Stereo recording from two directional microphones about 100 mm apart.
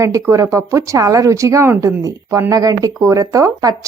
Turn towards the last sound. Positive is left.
turn(degrees=-35)  # may be behind; listen again after turning